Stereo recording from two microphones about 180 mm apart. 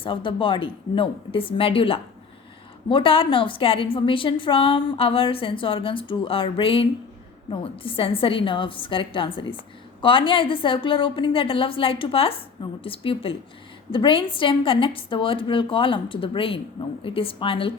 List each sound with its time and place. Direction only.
0.0 s a woman's voice: 30° left (ahead or behind)